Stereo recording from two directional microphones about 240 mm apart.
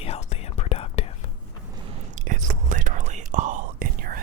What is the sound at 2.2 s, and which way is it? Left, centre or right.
Whispering, right.